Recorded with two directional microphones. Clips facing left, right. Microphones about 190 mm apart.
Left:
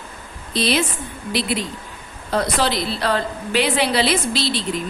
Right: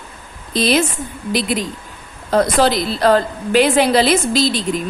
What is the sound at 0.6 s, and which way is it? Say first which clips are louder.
Speech: right 4 dB; 45° right (ahead or behind).